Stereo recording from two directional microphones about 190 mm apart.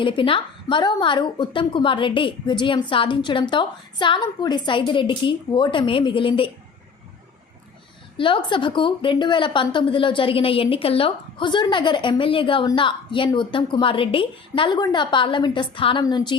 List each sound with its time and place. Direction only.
0.0 s a woman's voice: 25° left (ahead or behind)
8.2 s a woman's voice: 25° left (ahead or behind)